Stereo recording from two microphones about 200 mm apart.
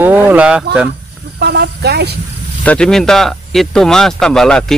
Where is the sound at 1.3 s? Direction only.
55° right (ahead or behind).